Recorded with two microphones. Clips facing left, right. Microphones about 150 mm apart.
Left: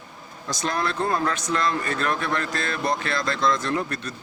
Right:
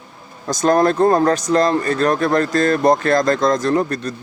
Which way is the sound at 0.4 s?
45° right (ahead or behind).